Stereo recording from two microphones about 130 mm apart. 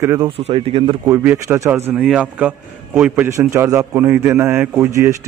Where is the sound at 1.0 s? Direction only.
15° right (ahead or behind).